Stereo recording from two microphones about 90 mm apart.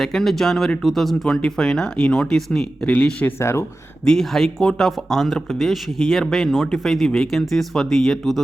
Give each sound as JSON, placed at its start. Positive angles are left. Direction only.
{"t": 0.0, "sound": "speech", "side_deg": 5}
{"t": 4.0, "sound": "speech", "side_deg": 5}